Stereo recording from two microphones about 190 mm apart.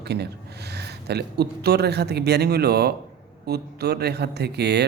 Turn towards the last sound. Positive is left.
turn(degrees=-60)  # may be behind; listen again after turning